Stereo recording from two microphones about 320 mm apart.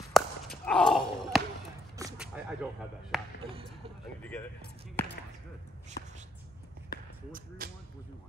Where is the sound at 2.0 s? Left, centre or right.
Centre.